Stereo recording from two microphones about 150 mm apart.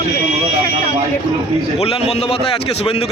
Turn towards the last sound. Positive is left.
turn(degrees=45)  # may be behind; listen again after turning